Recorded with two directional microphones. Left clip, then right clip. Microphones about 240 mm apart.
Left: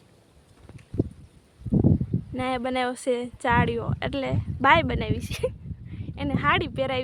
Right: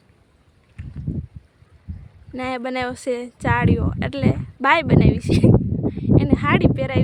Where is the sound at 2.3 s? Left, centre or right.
Centre.